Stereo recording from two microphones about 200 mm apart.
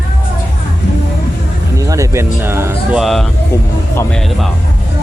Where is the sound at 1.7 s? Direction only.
15° right (ahead or behind).